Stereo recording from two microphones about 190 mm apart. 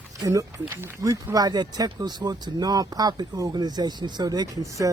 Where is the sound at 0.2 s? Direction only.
15° right (ahead or behind).